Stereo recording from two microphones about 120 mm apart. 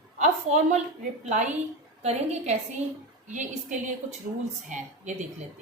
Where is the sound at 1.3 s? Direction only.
85° right.